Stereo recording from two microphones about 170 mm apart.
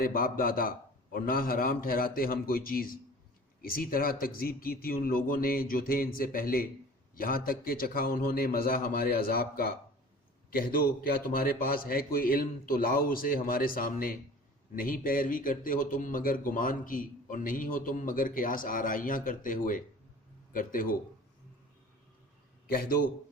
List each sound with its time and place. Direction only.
0.0 s a man's voice: 60° left (ahead or behind)
22.7 s a man's voice: 60° left (ahead or behind)